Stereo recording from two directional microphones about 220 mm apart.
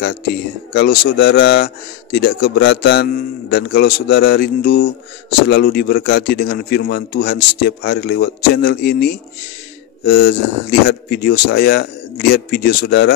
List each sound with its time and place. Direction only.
0.7 s a man's voice: 50° left (ahead or behind)